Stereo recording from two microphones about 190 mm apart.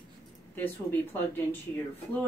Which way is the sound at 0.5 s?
10° left (ahead or behind).